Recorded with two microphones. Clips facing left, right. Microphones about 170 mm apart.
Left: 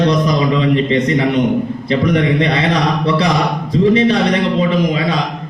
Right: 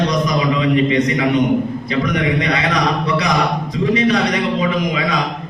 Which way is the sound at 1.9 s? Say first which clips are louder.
Left 6 dB; 30° left (ahead or behind).